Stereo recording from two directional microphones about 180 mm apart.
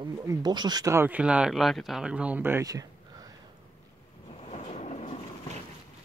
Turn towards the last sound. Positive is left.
turn(degrees=40)  # may be behind; listen again after turning